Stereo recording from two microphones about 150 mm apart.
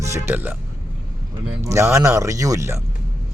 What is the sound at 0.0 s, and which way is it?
Speech, 15° right (ahead or behind).